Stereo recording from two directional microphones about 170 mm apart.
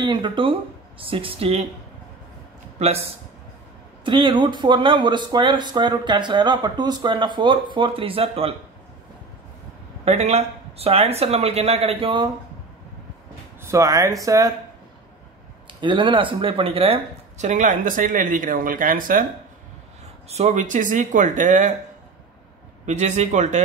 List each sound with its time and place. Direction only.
0.0 s speech: 30° right (ahead or behind)
2.8 s speech: 40° right (ahead or behind)
4.0 s speech: 30° right (ahead or behind)
10.0 s speech: 40° right (ahead or behind)
13.6 s speech: 15° right (ahead or behind)
15.8 s speech: 30° right (ahead or behind); by 19.2 s 55° right (ahead or behind)
20.2 s speech: 40° right (ahead or behind)
22.8 s speech: 45° right (ahead or behind)